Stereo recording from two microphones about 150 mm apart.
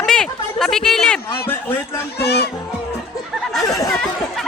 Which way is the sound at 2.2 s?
90° left.